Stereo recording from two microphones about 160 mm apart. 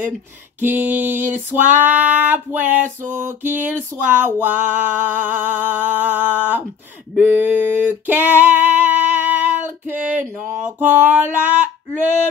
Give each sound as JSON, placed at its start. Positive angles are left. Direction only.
{"t": 0.6, "sound": "female singing", "side_deg": -10}